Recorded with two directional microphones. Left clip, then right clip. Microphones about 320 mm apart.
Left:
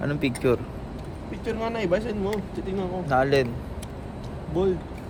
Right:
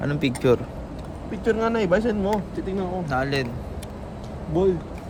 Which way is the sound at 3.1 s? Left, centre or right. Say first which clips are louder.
Left 6 dB; centre.